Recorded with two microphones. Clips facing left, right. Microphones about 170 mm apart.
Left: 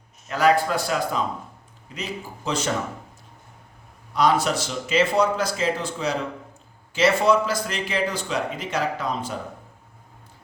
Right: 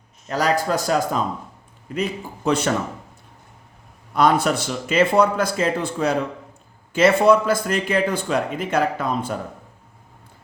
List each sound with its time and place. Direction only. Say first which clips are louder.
0.3 s a man's voice: left 1 dB; 40° right (ahead or behind)
2.0 s a man's voice: right 7 dB; 55° right (ahead or behind)
4.1 s a man's voice: right 3 dB; 55° right (ahead or behind)